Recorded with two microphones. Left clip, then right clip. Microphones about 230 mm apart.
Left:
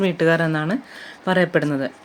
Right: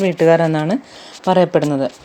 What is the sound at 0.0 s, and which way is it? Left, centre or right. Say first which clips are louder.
Speech: right 6 dB; centre.